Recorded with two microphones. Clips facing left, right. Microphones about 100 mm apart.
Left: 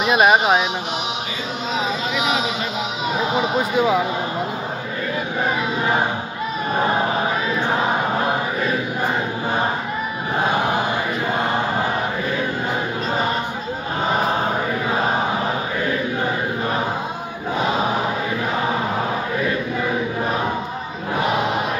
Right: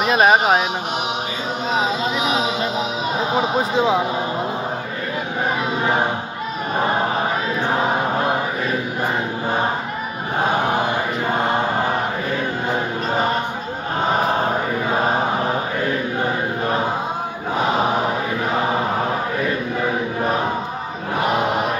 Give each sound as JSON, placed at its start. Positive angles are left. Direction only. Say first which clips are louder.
{"t": 0.0, "sound": "speech", "louder": "even", "side_deg": -40}
{"t": 3.3, "sound": "speech", "louder": "right 1 dB", "side_deg": -35}